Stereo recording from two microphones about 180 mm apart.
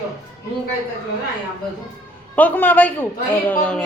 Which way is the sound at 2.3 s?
10° left (ahead or behind).